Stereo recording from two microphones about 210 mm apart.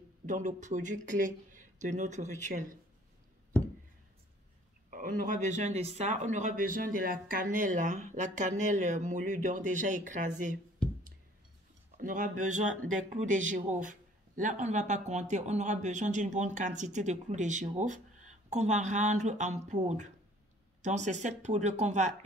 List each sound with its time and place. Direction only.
0.3 s speech: 35° right (ahead or behind)
4.9 s speech: 40° right (ahead or behind)
12.0 s speech: 40° right (ahead or behind)